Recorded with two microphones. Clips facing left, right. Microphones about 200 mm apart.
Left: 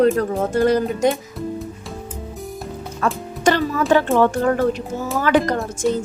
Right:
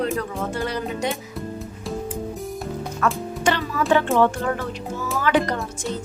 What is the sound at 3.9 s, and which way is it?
A woman's voice, 40° left (ahead or behind).